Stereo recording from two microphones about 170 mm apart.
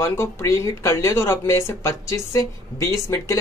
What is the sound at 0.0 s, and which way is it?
Speech, 15° left (ahead or behind).